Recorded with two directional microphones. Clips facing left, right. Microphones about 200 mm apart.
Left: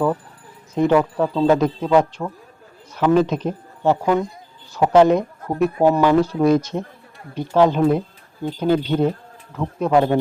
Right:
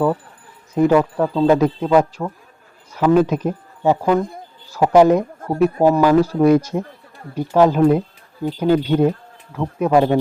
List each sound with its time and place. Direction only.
0.8 s speech: 5° right (ahead or behind)
4.2 s speech: 55° right (ahead or behind)
4.7 s speech: 10° right (ahead or behind)